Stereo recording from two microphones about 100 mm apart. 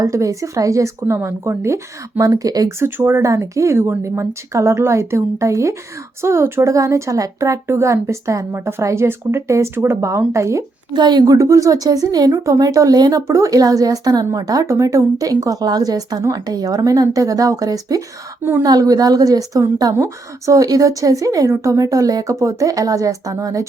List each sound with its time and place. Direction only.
0.0 s speech: 35° right (ahead or behind)
10.9 s speech: 45° right (ahead or behind)
11.3 s a woman's voice: 35° right (ahead or behind)